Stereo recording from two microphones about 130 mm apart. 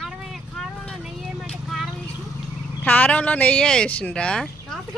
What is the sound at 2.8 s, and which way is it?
Speech, 10° left (ahead or behind).